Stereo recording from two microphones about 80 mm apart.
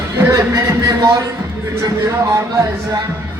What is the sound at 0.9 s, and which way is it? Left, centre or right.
Music, right.